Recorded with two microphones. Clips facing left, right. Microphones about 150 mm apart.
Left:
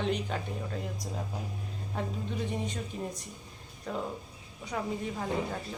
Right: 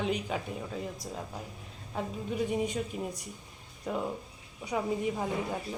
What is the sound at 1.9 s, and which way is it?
A woman's voice, 5° right (ahead or behind).